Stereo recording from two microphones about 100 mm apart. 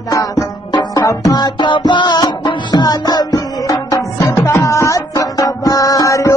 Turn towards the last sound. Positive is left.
turn(degrees=35)  # may be behind; listen again after turning